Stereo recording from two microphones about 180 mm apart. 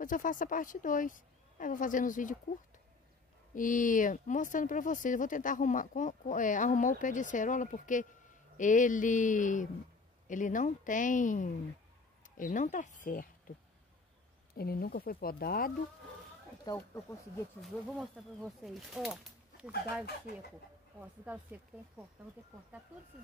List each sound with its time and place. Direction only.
0.0 s speech: 45° left (ahead or behind)
3.5 s speech: 45° left (ahead or behind)
14.5 s speech: 60° left (ahead or behind)
16.6 s speech: 15° left (ahead or behind)
17.6 s speech: centre (ahead or behind)